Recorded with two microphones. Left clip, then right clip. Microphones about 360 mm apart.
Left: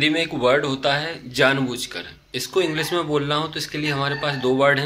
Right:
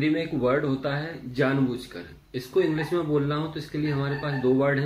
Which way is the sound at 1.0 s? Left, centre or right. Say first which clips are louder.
Left 7 dB; left.